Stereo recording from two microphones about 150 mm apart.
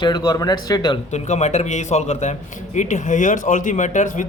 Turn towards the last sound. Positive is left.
turn(degrees=55)  # may be behind; listen again after turning